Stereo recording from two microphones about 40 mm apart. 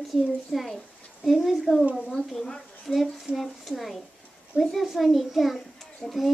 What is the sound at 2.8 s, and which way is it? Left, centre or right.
Speech, centre.